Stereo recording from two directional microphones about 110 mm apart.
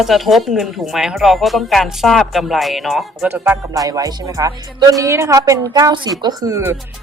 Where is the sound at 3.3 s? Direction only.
20° right (ahead or behind).